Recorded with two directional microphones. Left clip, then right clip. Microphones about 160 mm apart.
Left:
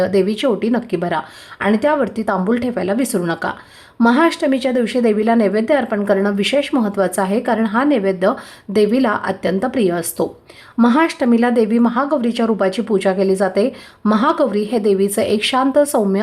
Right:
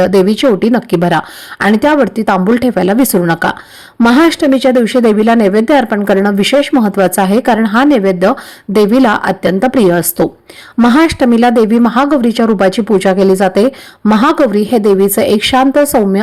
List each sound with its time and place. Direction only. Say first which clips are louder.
0.0 s speech: right 7 dB; 35° right (ahead or behind)